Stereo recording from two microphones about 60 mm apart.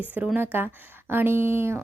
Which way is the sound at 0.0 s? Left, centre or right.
Right.